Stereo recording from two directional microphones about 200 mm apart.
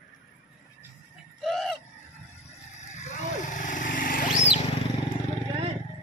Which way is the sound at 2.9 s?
35° left (ahead or behind).